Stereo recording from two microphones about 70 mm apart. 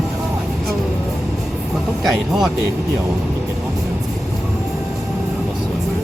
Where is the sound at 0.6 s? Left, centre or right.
Centre.